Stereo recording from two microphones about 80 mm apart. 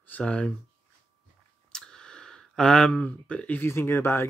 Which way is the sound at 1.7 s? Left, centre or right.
Centre.